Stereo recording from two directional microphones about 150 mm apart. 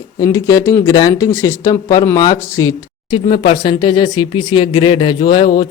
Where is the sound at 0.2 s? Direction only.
20° left (ahead or behind).